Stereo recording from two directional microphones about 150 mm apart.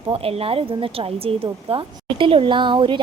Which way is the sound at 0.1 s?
40° right (ahead or behind).